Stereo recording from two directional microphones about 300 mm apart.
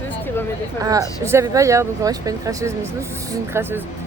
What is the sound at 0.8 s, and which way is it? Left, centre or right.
Speech, centre.